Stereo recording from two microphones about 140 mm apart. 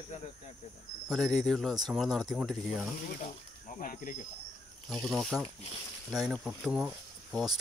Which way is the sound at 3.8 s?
75° left (ahead or behind).